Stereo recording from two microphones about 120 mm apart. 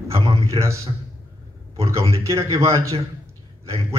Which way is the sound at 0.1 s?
30° right (ahead or behind).